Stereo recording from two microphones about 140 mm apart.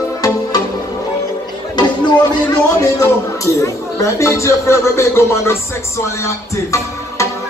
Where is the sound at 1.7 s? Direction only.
30° left (ahead or behind).